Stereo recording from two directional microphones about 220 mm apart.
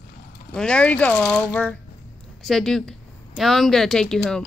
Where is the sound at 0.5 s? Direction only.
5° left (ahead or behind).